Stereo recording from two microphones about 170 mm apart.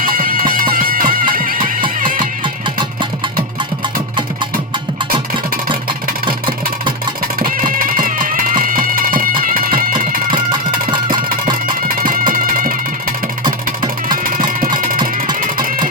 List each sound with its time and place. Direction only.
0.0 s music: 55° right (ahead or behind)
2.4 s music: 30° right (ahead or behind)
7.3 s music: 55° right (ahead or behind)
11.9 s music: 55° right (ahead or behind)
13.4 s music: 25° right (ahead or behind)
14.3 s music: 55° right (ahead or behind)